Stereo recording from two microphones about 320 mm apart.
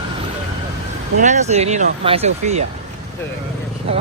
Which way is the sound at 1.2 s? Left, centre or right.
Right.